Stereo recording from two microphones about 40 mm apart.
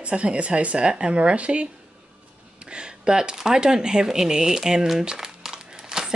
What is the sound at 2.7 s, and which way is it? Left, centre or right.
Speech, right.